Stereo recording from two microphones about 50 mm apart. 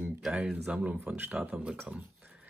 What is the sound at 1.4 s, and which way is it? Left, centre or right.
Speech, right.